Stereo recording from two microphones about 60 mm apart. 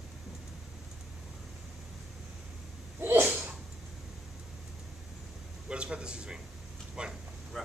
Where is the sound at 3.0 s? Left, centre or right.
Right.